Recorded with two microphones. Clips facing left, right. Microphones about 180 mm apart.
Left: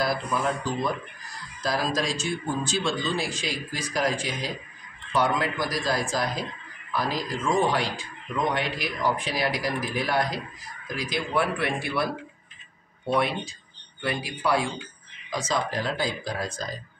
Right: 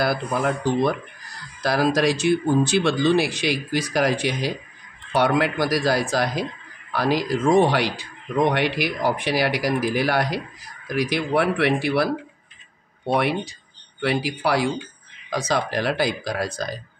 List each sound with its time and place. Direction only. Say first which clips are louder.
0.0 s speech: right 4 dB; 65° right (ahead or behind)